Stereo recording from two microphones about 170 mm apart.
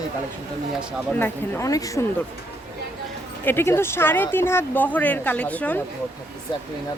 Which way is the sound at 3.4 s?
15° left (ahead or behind).